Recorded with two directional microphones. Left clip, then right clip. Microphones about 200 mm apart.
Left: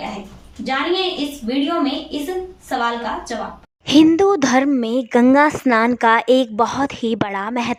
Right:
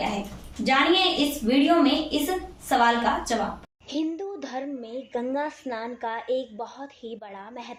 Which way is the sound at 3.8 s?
45° left (ahead or behind).